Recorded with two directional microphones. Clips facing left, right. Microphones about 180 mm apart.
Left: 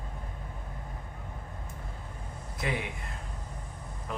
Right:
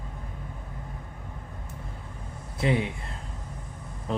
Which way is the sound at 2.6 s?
30° right (ahead or behind).